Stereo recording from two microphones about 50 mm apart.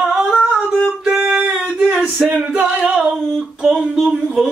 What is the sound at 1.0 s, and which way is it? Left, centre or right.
Singing, centre.